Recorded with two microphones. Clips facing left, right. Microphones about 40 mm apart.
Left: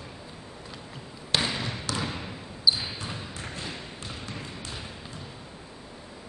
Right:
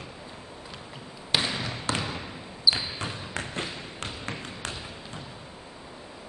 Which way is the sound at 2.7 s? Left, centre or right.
Right.